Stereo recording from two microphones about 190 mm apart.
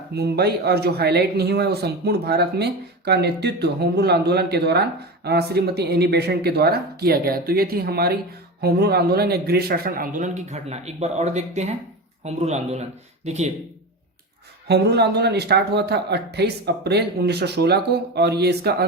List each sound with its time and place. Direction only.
0.2 s speech: 60° right (ahead or behind); by 13.5 s 35° right (ahead or behind)
14.7 s speech: 60° right (ahead or behind)